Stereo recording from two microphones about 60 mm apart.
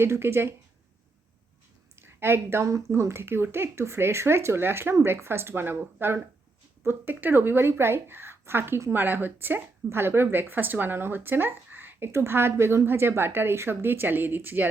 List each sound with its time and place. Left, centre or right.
0.0 s a woman's voice: right
2.0 s a sound: right
2.6 s speech: right
2.9 s a woman's voice: right